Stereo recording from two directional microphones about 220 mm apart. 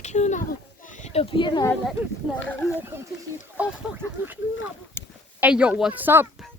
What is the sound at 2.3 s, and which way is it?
Speech, 5° right (ahead or behind).